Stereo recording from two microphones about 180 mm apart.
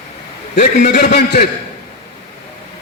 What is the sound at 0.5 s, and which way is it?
Speech, 45° left (ahead or behind).